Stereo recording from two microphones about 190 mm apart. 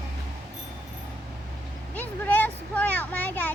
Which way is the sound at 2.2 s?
10° left (ahead or behind).